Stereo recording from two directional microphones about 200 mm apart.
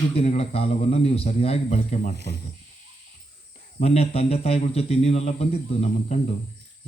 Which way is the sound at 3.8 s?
30° left (ahead or behind).